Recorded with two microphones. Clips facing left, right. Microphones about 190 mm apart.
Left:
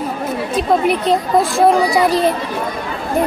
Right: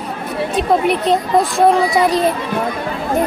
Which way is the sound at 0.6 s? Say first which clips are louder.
Even; centre (ahead or behind).